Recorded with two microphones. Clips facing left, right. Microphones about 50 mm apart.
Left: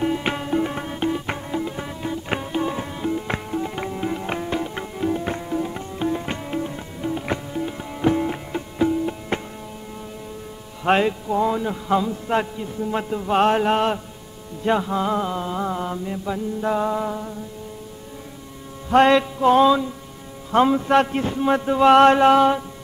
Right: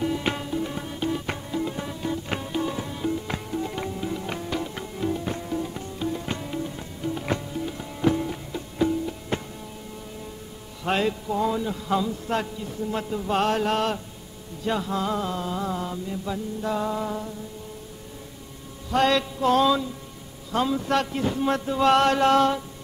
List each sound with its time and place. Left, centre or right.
0.0 s music: left
0.5 s music: left
1.1 s music: left
5.7 s music: left
7.2 s music: centre
8.3 s music: left
10.8 s a man's voice: left
18.9 s music: left
19.1 s a man's voice: centre
20.5 s music: left
21.4 s a sound: centre
21.7 s a man's voice: left
22.3 s a sound: centre